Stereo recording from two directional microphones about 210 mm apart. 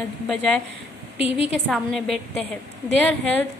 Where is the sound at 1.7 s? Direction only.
Centre (ahead or behind).